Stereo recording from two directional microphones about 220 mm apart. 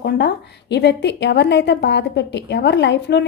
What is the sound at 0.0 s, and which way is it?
A woman's voice, 50° left (ahead or behind).